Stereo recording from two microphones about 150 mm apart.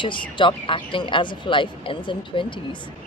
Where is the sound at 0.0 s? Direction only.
35° left (ahead or behind).